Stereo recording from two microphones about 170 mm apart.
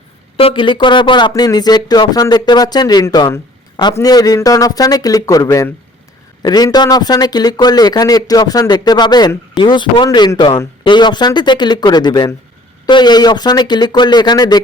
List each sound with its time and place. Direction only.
0.3 s speech: 30° left (ahead or behind)